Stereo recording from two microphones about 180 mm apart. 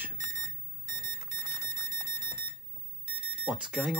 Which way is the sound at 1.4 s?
20° right (ahead or behind).